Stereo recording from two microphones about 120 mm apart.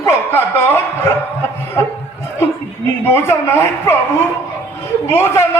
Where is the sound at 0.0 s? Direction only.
15° left (ahead or behind).